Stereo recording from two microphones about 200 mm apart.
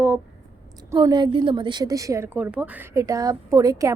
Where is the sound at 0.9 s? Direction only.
20° right (ahead or behind).